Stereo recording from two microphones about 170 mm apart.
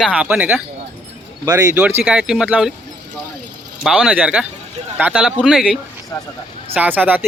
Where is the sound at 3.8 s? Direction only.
5° right (ahead or behind).